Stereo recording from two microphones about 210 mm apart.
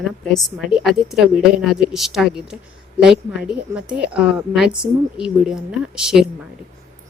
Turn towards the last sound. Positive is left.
turn(degrees=-5)  # may be behind; listen again after turning